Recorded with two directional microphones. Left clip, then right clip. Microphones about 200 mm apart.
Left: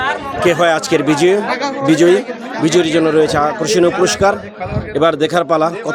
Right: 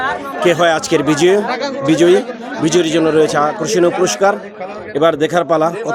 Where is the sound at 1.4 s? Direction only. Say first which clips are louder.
Left 1 dB; 55° left (ahead or behind).